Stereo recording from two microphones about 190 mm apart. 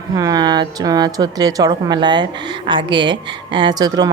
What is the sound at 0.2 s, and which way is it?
A woman's voice, 20° right (ahead or behind).